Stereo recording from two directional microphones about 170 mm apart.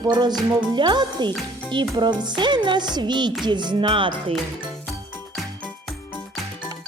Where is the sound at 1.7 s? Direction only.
25° right (ahead or behind).